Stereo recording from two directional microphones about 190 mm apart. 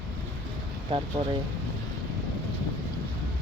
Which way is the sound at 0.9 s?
25° right (ahead or behind).